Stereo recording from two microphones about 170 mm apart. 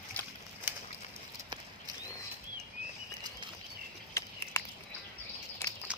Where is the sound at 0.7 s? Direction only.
10° right (ahead or behind).